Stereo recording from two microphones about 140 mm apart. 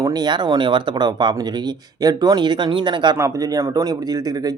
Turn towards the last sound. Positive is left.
turn(degrees=-25)  # may be behind; listen again after turning